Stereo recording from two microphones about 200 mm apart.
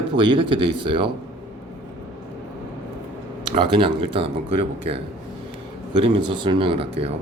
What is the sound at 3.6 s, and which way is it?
Speech, 25° right (ahead or behind).